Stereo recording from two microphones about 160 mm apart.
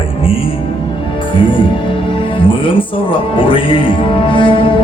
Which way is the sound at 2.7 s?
35° left (ahead or behind).